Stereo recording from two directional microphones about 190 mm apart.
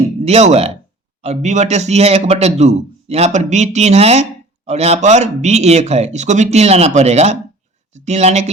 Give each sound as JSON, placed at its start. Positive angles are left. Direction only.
{"t": 0.3, "sound": "a man's voice", "side_deg": -35}